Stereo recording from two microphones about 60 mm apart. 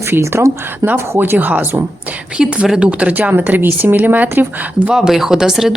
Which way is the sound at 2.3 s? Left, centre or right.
Centre.